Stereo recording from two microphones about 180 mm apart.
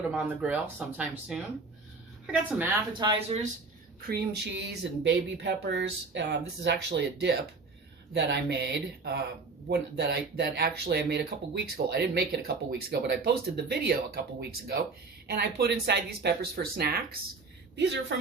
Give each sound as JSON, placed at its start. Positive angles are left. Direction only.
{"t": 0.1, "sound": "speech", "side_deg": -5}
{"t": 2.9, "sound": "speech", "side_deg": -25}
{"t": 4.0, "sound": "speech", "side_deg": -60}
{"t": 15.3, "sound": "speech", "side_deg": -65}
{"t": 17.7, "sound": "speech", "side_deg": -75}